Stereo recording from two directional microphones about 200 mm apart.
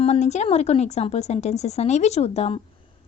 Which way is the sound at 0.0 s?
35° left (ahead or behind).